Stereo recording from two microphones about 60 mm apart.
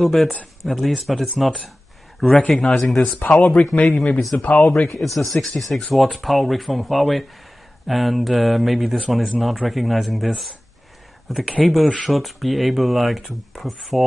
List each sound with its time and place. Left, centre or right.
0.0 s speech: centre
2.4 s speech: centre
4.8 s speech: centre